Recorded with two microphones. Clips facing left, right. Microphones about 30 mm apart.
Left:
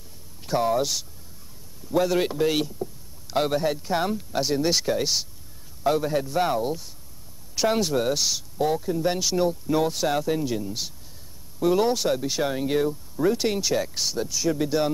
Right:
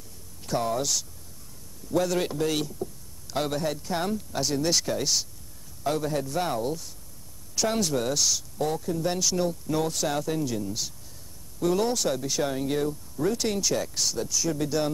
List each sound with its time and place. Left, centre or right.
0.5 s speech: centre